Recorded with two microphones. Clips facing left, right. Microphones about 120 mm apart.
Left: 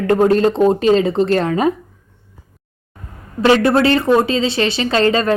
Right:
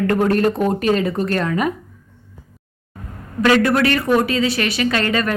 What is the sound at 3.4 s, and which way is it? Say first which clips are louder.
A woman's voice: left 2 dB; 25° left (ahead or behind).